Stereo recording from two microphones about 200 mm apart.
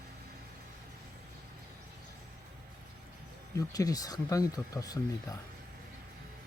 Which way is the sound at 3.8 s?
20° left (ahead or behind).